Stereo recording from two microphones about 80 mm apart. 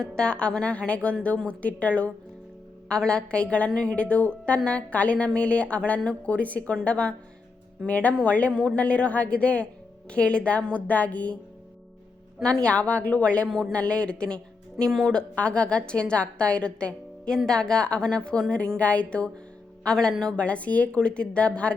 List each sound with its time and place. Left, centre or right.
0.0 s a woman's voice: centre
12.4 s a woman's voice: centre